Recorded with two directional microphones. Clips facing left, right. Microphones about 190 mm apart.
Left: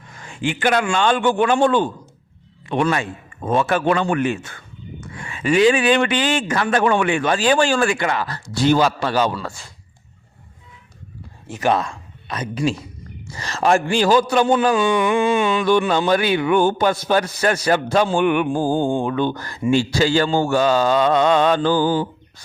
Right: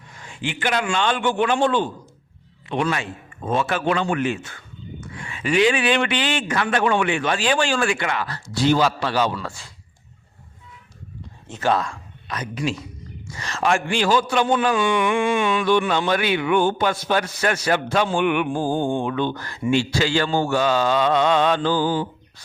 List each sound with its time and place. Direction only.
0.2 s a man's voice: 45° left (ahead or behind)
11.4 s a man's voice: 15° left (ahead or behind); by 15.3 s 35° left (ahead or behind)
15.3 s a sound: 25° left (ahead or behind)
15.9 s a man's voice: 40° left (ahead or behind)